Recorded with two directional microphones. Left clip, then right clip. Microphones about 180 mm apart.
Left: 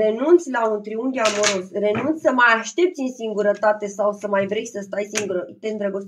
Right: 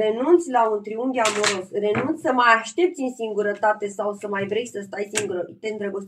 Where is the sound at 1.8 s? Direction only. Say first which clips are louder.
Left 2 dB; 35° left (ahead or behind).